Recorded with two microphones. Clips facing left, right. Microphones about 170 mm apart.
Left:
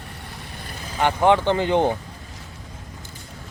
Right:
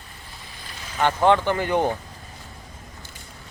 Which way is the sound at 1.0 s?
15° left (ahead or behind).